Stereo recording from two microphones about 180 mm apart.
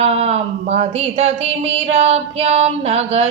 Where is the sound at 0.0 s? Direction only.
35° right (ahead or behind).